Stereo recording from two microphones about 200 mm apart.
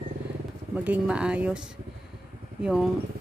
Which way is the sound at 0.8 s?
5° right (ahead or behind).